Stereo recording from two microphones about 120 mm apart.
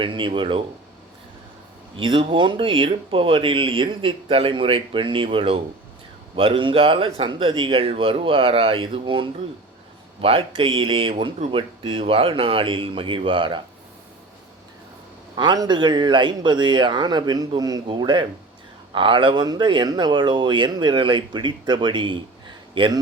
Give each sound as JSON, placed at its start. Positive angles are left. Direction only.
{"t": 0.0, "sound": "speech", "side_deg": -45}
{"t": 2.0, "sound": "a man's voice", "side_deg": -45}
{"t": 15.4, "sound": "speech", "side_deg": -35}